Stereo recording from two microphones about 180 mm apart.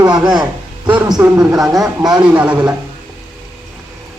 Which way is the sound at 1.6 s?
Centre (ahead or behind).